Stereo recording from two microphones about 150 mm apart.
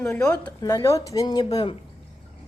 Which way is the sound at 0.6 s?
20° left (ahead or behind).